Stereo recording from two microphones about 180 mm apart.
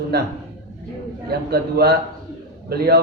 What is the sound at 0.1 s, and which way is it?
Speech, 60° right (ahead or behind).